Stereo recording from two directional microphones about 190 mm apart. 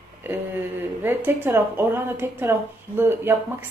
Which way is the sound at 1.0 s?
10° right (ahead or behind).